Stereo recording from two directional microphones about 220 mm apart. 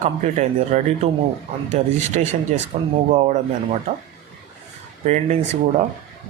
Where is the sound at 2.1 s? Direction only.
35° right (ahead or behind).